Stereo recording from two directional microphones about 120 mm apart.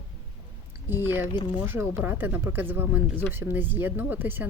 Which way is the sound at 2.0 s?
15° right (ahead or behind).